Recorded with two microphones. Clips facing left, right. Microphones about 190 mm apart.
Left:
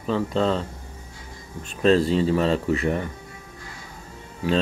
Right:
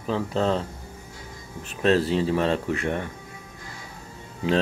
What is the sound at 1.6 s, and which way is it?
Speech, 5° right (ahead or behind).